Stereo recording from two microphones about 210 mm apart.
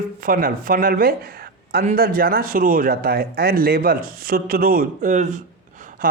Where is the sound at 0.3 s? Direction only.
45° right (ahead or behind).